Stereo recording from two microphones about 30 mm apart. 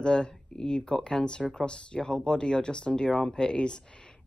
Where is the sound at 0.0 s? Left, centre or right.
Left.